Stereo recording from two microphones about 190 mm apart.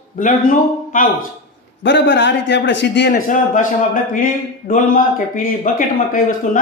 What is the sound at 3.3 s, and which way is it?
A man's voice, 45° left (ahead or behind).